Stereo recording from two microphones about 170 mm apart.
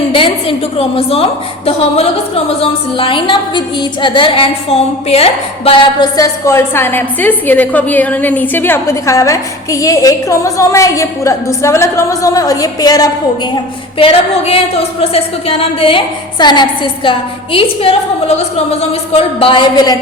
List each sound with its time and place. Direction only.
0.1 s a woman's voice: 30° left (ahead or behind)
14.0 s a woman's voice: 35° left (ahead or behind)